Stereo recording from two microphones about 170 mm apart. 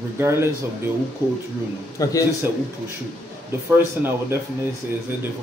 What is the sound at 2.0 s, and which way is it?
Speech, 20° left (ahead or behind).